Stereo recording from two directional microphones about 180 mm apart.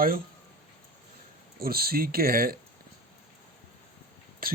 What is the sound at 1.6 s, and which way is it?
Speech, 55° right (ahead or behind).